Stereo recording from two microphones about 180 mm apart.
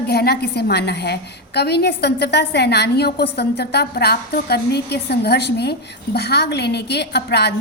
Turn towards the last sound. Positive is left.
turn(degrees=65)  # may be behind; listen again after turning